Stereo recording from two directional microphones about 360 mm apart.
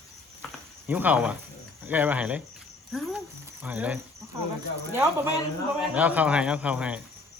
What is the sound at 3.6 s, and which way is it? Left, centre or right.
Speech, centre.